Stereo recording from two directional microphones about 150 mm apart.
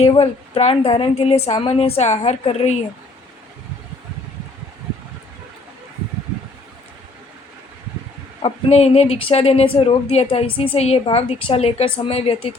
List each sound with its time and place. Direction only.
0.0 s a woman's voice: 40° left (ahead or behind)
8.4 s a woman's voice: 40° left (ahead or behind)